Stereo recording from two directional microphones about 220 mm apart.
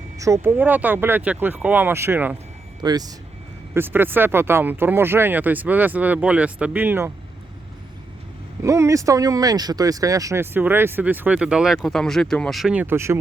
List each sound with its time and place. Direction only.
0.2 s speech: 10° right (ahead or behind)
8.6 s speech: 15° right (ahead or behind)